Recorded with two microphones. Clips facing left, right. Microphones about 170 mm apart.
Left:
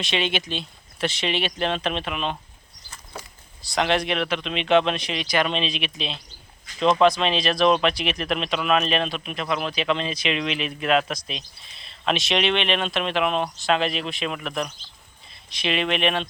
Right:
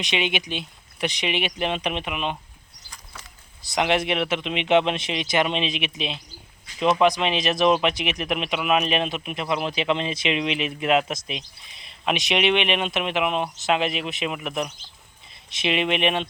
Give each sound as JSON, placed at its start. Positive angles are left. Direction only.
{"t": 0.0, "sound": "speech", "side_deg": -15}
{"t": 3.6, "sound": "speech", "side_deg": -20}